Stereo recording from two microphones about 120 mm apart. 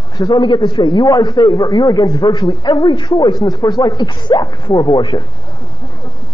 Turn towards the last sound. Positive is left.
turn(degrees=40)  # may be behind; listen again after turning